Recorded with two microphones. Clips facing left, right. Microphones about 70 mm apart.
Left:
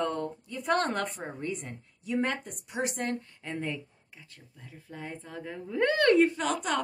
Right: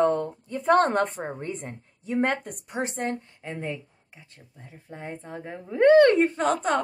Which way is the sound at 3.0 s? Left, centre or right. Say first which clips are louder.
Right 3 dB; right.